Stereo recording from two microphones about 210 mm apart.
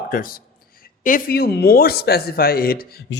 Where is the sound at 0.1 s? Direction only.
40° left (ahead or behind).